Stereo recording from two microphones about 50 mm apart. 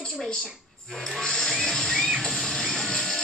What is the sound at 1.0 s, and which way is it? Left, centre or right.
Music, centre.